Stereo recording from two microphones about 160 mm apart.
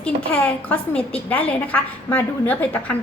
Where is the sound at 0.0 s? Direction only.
5° left (ahead or behind).